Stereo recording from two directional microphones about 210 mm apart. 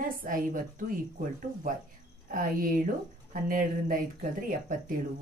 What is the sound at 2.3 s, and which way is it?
Speech, 40° right (ahead or behind).